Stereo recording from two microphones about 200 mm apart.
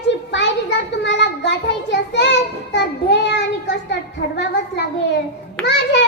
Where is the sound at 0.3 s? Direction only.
60° left (ahead or behind).